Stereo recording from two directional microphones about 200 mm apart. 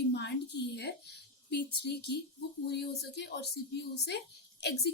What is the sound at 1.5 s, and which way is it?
A woman's voice, 55° left (ahead or behind).